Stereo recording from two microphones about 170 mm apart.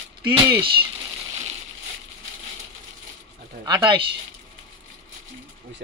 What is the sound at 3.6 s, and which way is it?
Speech, 25° right (ahead or behind).